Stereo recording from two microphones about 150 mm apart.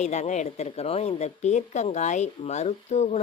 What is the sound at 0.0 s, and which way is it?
A woman's voice, 50° left (ahead or behind).